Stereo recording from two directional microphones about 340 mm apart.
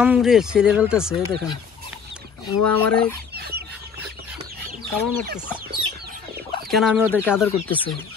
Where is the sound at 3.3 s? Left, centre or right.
Right.